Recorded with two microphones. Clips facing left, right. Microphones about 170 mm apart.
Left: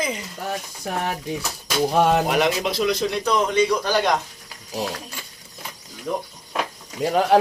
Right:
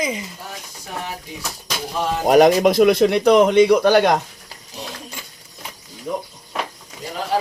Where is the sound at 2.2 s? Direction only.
40° right (ahead or behind); by 4.1 s 60° right (ahead or behind).